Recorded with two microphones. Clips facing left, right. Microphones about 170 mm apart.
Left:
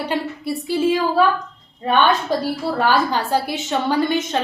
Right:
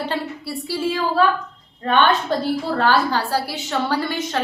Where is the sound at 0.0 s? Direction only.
15° left (ahead or behind).